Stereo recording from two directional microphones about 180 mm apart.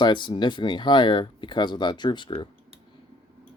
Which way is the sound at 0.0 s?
25° left (ahead or behind).